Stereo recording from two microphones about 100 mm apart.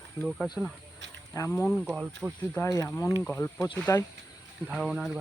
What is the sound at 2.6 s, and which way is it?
Speech, 40° left (ahead or behind).